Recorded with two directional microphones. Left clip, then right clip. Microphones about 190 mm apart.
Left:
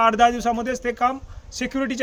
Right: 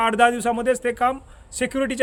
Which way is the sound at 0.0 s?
40° right (ahead or behind).